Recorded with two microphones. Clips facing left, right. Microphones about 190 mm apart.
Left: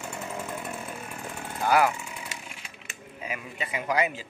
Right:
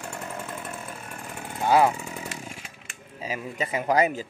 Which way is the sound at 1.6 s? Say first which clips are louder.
Right 3 dB; 25° right (ahead or behind).